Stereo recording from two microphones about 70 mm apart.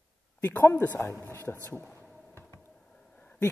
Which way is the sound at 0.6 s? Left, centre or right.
Left.